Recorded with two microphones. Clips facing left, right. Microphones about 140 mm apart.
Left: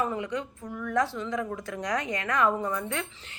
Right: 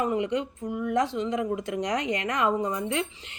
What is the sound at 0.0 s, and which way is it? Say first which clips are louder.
A woman's voice: right 4 dB; 20° right (ahead or behind).